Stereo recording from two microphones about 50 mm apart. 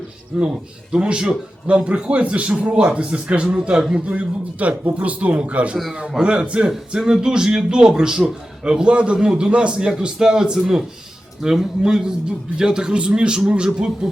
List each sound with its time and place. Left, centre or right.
0.3 s a man's voice: centre
4.9 s a man's voice: right; by 14.1 s centre